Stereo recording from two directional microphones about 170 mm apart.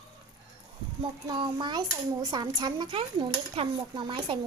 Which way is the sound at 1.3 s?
25° right (ahead or behind).